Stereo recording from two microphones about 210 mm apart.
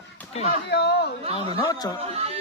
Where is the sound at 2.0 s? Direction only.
30° right (ahead or behind).